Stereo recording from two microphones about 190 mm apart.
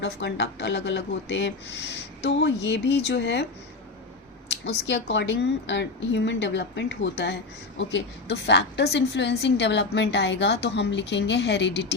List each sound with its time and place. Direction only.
0.0 s a woman's voice: 65° left (ahead or behind)
4.9 s a woman's voice: 65° left (ahead or behind)